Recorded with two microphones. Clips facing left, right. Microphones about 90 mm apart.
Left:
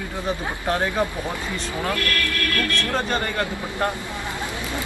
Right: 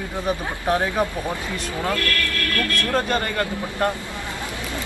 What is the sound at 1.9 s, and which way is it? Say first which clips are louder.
Speech: even; 20° left (ahead or behind).